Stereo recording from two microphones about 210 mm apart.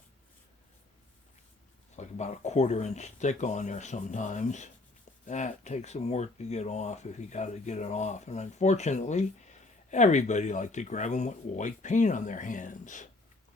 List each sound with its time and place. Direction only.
2.0 s speech: 35° left (ahead or behind)